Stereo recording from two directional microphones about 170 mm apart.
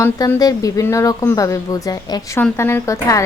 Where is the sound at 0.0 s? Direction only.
15° left (ahead or behind).